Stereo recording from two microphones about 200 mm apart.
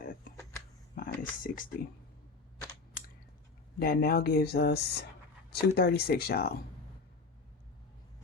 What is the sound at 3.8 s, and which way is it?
Speech, 50° left (ahead or behind).